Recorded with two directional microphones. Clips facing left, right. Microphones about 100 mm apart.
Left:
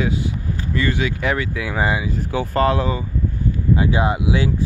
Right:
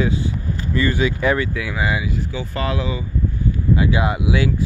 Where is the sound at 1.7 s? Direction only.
35° left (ahead or behind).